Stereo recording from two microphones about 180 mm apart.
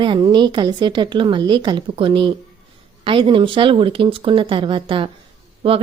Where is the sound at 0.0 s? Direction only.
25° right (ahead or behind).